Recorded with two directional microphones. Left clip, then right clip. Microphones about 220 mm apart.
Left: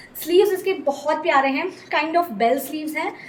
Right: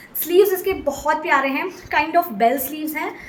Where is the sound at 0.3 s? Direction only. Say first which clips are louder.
Right 1 dB; 15° right (ahead or behind).